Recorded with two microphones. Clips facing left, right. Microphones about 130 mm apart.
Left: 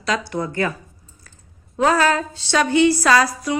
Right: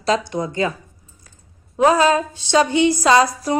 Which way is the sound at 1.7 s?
20° right (ahead or behind).